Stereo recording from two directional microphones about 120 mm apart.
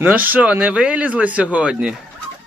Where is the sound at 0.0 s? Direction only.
15° right (ahead or behind).